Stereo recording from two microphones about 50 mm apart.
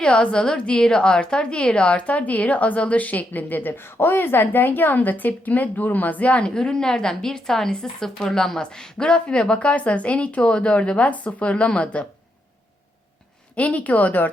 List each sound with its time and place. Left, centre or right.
0.0 s a woman's voice: centre
6.4 s speech: centre
13.6 s a woman's voice: left